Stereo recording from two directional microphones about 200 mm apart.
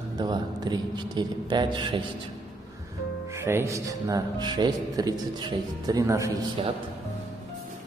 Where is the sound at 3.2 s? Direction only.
15° right (ahead or behind).